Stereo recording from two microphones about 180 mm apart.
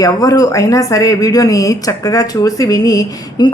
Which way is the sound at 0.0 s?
20° left (ahead or behind).